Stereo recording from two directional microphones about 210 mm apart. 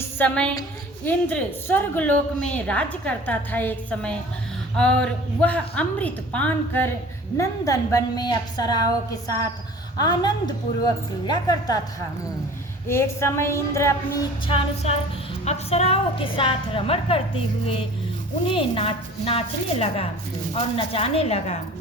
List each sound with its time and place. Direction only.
0.0 s a woman's voice: 5° left (ahead or behind)
12.9 s a woman's voice: 15° left (ahead or behind)
14.4 s a woman's voice: 30° left (ahead or behind)